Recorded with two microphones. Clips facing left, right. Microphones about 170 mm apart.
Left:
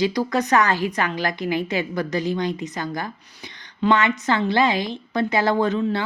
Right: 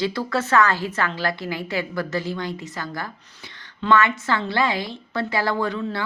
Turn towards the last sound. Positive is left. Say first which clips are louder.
# left 4 dB
turn(degrees=20)  # may be behind; listen again after turning